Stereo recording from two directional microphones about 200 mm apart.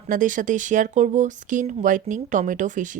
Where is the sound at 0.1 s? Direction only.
40° right (ahead or behind).